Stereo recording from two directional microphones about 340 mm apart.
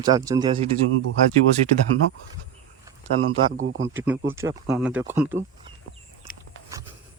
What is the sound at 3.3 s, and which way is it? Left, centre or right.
Speech, right.